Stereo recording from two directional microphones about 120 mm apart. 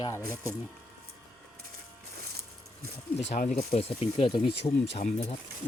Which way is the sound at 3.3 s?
65° left (ahead or behind).